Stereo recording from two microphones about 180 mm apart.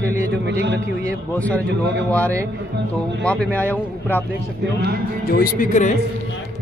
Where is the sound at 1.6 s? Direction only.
75° right (ahead or behind).